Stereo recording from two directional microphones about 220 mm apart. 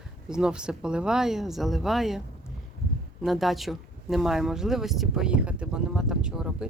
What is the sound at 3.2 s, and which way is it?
Speech, centre (ahead or behind).